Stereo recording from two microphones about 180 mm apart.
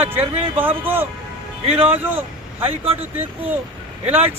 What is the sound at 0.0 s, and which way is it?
Speech, 10° right (ahead or behind).